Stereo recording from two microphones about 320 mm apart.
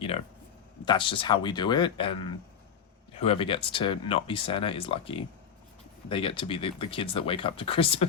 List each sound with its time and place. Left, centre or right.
0.9 s speech: centre
3.2 s speech: centre